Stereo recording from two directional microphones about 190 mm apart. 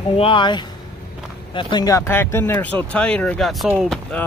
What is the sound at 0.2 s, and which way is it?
Speech, 25° left (ahead or behind).